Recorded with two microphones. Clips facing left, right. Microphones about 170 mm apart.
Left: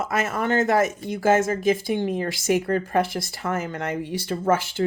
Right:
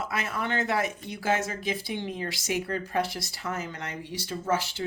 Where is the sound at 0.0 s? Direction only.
45° left (ahead or behind).